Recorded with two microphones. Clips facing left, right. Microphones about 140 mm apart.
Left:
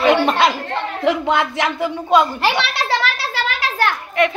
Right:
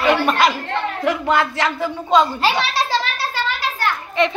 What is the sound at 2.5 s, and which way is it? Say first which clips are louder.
Children playing: even; 70° left (ahead or behind).